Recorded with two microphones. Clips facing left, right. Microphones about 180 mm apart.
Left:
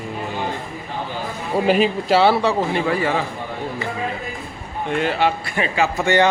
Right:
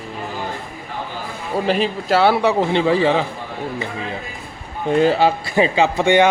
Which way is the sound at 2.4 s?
20° right (ahead or behind).